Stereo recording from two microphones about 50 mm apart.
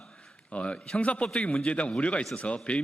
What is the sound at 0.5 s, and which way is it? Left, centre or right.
Speech, left.